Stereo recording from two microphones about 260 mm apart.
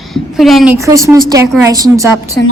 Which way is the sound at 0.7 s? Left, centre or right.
Centre.